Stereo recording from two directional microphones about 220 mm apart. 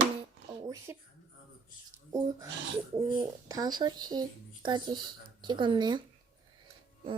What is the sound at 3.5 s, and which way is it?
Speech, 15° right (ahead or behind).